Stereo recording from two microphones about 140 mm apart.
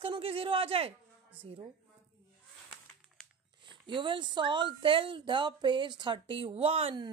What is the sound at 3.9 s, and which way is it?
Speech, 35° right (ahead or behind).